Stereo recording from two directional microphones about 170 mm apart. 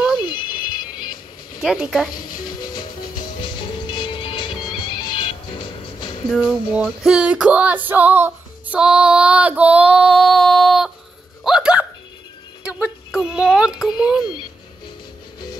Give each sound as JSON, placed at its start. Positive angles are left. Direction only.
{"t": 0.2, "sound": "ringtone", "side_deg": 25}
{"t": 1.6, "sound": "female singing", "side_deg": 0}
{"t": 2.1, "sound": "speech", "side_deg": 55}
{"t": 2.4, "sound": "music", "side_deg": 25}
{"t": 6.3, "sound": "female singing", "side_deg": -5}
{"t": 11.4, "sound": "hiccup", "side_deg": -5}
{"t": 12.6, "sound": "music", "side_deg": -5}
{"t": 13.3, "sound": "female singing", "side_deg": -5}